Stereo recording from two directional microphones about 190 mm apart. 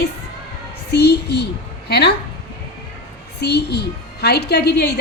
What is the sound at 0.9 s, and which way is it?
A woman's voice, 60° left (ahead or behind).